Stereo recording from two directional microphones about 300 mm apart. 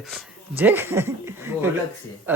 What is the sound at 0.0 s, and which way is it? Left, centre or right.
Speech, centre.